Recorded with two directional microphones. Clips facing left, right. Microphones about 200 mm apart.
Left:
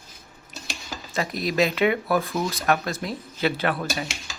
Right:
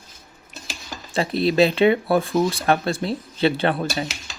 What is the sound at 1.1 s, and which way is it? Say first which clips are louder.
Speech: right 6 dB; 30° right (ahead or behind).